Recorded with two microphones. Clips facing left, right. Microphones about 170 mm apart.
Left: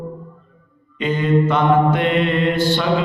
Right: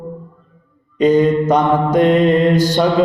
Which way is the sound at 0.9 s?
40° right (ahead or behind).